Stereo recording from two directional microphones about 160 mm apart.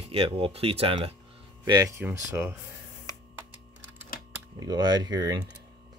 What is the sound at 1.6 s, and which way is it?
Speech, 25° right (ahead or behind).